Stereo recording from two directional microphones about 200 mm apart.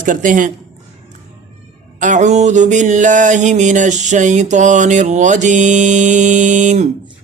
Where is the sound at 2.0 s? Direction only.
40° right (ahead or behind).